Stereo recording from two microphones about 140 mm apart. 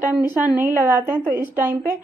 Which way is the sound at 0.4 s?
10° right (ahead or behind).